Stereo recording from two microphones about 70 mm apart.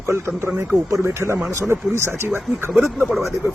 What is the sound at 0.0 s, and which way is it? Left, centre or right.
A man's voice, right.